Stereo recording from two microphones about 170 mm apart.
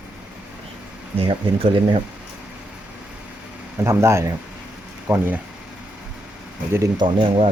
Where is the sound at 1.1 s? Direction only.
30° right (ahead or behind).